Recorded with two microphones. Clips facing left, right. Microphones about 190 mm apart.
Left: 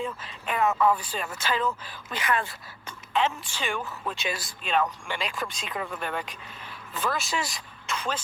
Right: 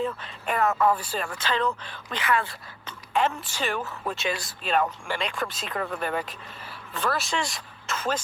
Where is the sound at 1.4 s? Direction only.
10° left (ahead or behind).